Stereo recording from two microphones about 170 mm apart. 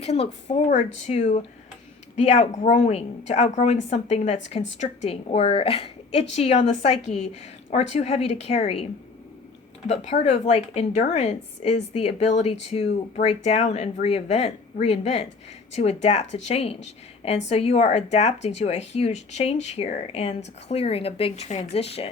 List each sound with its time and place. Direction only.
0.0 s a woman's voice: 40° left (ahead or behind)